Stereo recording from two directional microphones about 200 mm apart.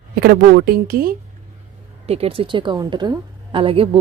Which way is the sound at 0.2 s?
50° right (ahead or behind).